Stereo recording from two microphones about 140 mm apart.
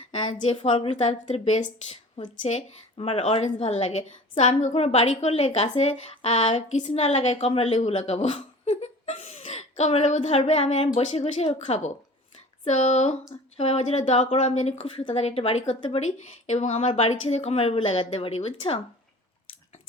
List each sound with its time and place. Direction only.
0.1 s a sound: 35° left (ahead or behind)
0.4 s speech: 45° left (ahead or behind)
5.7 s speech: 50° left (ahead or behind)